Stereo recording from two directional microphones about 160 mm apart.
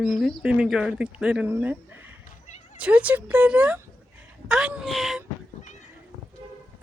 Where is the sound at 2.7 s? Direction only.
10° right (ahead or behind).